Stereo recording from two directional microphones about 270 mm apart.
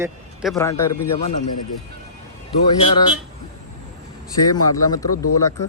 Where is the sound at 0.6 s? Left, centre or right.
Centre.